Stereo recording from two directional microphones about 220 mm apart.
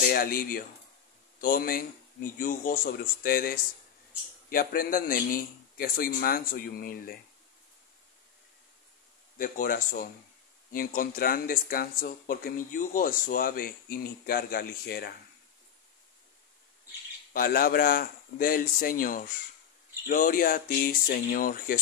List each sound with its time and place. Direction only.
0.1 s speech: 40° left (ahead or behind)
9.4 s speech: 40° left (ahead or behind)
17.3 s speech: 40° left (ahead or behind)